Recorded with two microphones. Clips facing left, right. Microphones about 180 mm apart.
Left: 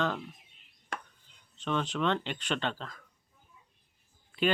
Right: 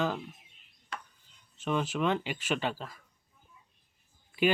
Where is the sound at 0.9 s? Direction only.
50° left (ahead or behind).